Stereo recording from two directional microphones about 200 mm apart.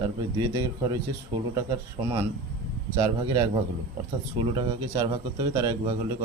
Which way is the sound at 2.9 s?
20° right (ahead or behind).